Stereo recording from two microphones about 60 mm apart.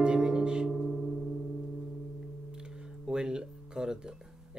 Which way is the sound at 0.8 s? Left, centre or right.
Centre.